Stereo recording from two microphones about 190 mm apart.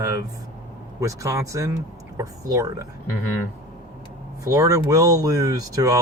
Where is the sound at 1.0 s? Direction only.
15° right (ahead or behind).